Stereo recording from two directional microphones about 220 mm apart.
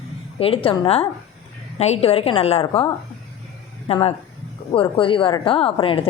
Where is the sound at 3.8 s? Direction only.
25° left (ahead or behind).